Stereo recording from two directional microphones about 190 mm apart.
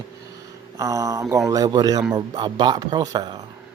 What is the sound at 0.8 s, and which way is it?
Speech, 15° right (ahead or behind).